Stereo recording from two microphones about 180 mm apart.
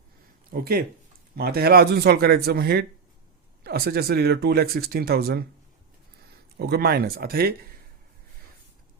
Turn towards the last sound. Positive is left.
turn(degrees=-55)  # may be behind; listen again after turning